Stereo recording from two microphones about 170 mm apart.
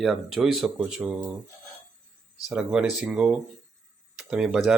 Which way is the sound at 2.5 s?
5° right (ahead or behind).